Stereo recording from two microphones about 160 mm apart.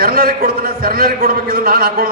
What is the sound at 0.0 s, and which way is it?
A man's voice, 65° right (ahead or behind).